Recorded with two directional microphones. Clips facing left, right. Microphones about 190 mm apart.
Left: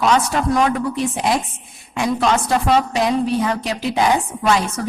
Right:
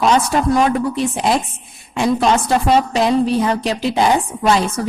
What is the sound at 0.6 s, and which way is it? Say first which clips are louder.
Speech: right 2 dB; 30° right (ahead or behind).